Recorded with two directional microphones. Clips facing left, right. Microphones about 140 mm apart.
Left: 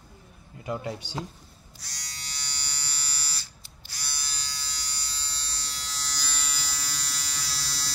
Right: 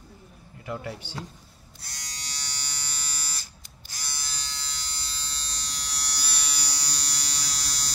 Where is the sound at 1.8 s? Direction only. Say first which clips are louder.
Right 2 dB; 50° right (ahead or behind).